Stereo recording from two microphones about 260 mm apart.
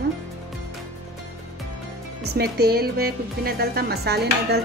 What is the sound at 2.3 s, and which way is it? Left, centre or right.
A woman's voice, right.